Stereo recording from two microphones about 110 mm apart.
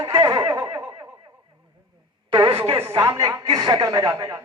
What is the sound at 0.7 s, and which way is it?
Snicker, 25° right (ahead or behind).